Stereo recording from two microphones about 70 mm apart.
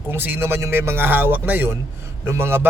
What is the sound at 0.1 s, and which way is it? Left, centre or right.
Speech, right.